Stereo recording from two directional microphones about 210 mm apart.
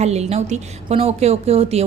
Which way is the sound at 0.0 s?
30° right (ahead or behind).